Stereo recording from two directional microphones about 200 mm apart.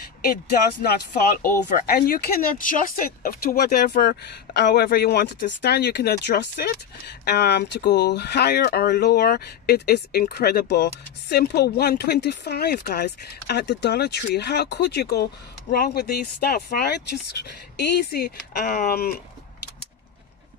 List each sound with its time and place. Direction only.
0.8 s speech: 45° left (ahead or behind)